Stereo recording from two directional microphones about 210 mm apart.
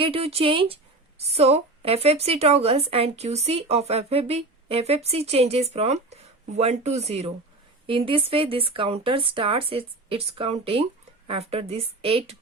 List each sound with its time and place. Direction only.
0.0 s a woman's voice: 25° right (ahead or behind)